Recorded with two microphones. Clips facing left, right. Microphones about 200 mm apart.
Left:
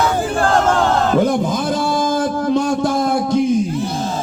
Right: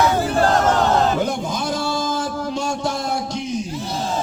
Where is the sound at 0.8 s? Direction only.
50° left (ahead or behind).